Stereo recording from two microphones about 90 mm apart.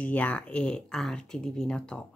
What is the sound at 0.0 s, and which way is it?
A woman's voice, 15° left (ahead or behind).